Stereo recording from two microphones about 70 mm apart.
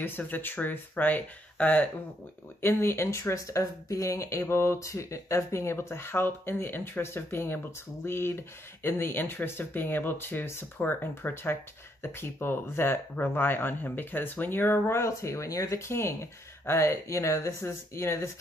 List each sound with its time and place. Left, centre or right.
0.0 s speech: left
2.6 s speech: left